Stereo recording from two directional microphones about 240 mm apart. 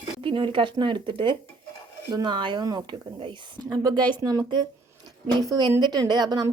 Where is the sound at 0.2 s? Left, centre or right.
Right.